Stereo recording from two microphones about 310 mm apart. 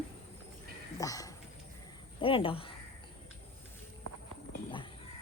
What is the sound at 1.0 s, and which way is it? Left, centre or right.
Speech, centre.